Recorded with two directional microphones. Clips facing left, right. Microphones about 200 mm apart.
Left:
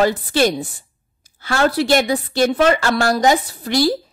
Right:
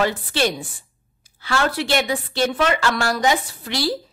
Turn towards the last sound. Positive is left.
turn(degrees=45)  # may be behind; listen again after turning